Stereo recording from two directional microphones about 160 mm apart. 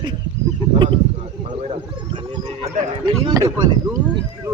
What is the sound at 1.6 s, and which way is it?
Speech, 35° right (ahead or behind).